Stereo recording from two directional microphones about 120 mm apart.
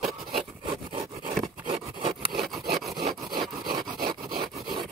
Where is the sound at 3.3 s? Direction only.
40° right (ahead or behind).